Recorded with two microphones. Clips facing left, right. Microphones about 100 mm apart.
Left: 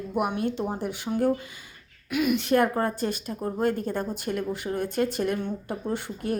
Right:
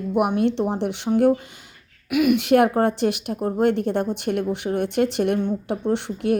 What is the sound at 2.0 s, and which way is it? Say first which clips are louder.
A woman's voice: right 6 dB; 90° right.